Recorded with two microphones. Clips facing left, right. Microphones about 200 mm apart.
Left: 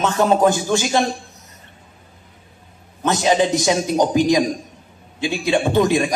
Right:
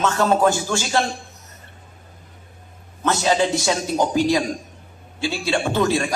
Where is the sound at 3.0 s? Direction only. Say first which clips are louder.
Left 2 dB; 15° left (ahead or behind).